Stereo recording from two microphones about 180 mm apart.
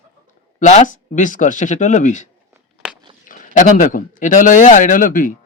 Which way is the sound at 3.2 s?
45° left (ahead or behind).